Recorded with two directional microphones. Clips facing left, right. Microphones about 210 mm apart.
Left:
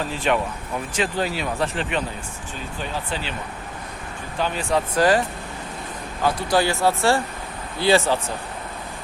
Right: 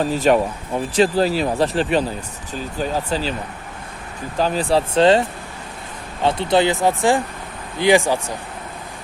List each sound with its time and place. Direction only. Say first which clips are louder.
0.0 s speech: right 7 dB; 40° right (ahead or behind)
4.4 s speech: right 5 dB; 35° right (ahead or behind)
6.2 s speech: right 4 dB; 25° right (ahead or behind)